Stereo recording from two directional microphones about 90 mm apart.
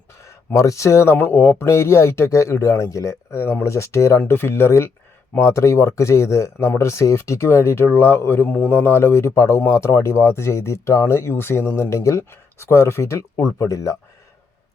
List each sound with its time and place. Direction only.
0.3 s speech: 35° left (ahead or behind)
1.1 s a man's voice: 20° left (ahead or behind)
8.4 s a man's voice: 15° left (ahead or behind); by 13.9 s 35° left (ahead or behind)